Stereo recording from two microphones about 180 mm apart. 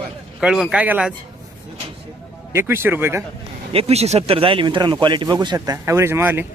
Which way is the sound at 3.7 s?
35° right (ahead or behind).